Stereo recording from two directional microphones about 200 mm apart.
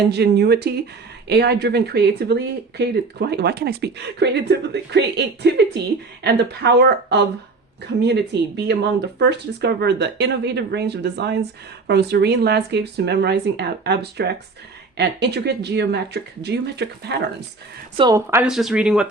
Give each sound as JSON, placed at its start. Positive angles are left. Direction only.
{"t": 0.1, "sound": "speech", "side_deg": -55}
{"t": 17.9, "sound": "speech", "side_deg": -20}
{"t": 18.3, "sound": "speech", "side_deg": -5}